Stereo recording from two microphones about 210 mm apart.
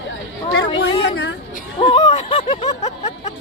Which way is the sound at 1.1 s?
60° left (ahead or behind).